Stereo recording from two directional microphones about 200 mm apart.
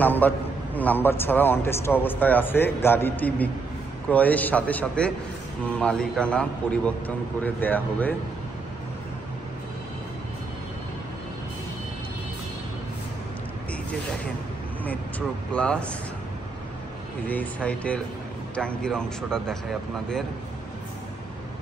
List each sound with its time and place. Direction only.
0.0 s a man's voice: 10° left (ahead or behind)
14.9 s speech: 5° left (ahead or behind)
17.3 s speech: 5° left (ahead or behind)